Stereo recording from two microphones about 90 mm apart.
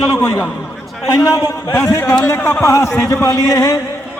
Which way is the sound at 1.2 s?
40° left (ahead or behind).